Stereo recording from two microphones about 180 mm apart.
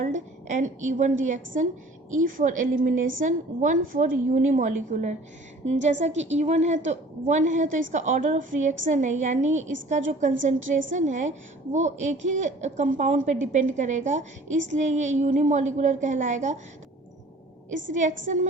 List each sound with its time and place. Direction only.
0.0 s a woman's voice: 45° right (ahead or behind)